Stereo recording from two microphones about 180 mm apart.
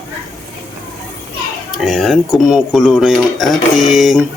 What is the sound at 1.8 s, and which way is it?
Speech, centre (ahead or behind).